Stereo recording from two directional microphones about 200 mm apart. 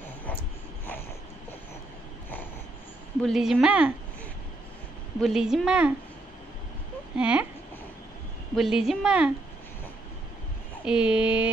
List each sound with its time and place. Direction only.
3.2 s a woman's voice: centre (ahead or behind)
5.2 s a woman's voice: 5° right (ahead or behind)
7.2 s a woman's voice: 5° right (ahead or behind)
8.5 s a woman's voice: centre (ahead or behind)
10.9 s a woman's voice: 5° right (ahead or behind)